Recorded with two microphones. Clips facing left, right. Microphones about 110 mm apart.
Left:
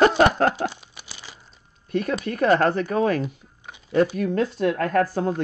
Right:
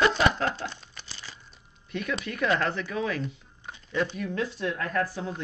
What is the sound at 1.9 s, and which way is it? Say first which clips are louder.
Speech: left 7 dB; 40° left (ahead or behind).